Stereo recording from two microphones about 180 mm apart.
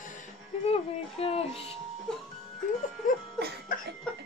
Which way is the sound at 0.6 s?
35° left (ahead or behind).